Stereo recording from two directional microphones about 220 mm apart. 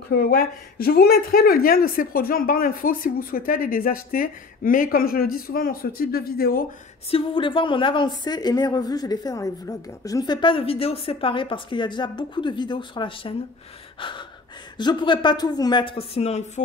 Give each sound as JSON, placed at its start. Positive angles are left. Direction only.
{"t": 0.1, "sound": "speech", "side_deg": 45}
{"t": 7.1, "sound": "a woman's voice", "side_deg": 25}
{"t": 13.9, "sound": "gasp", "side_deg": 20}
{"t": 14.8, "sound": "a woman's voice", "side_deg": 20}